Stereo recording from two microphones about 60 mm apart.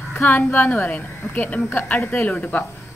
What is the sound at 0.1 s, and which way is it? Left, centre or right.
Speech, left.